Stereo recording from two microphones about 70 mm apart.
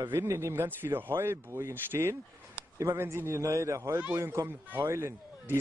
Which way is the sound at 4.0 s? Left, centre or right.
Right.